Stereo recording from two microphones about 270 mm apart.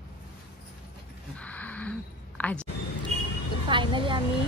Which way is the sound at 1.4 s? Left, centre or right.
Centre.